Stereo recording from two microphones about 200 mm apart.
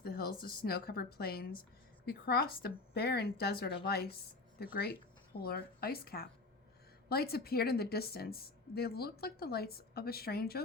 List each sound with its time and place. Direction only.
0.0 s a woman's voice: 50° left (ahead or behind)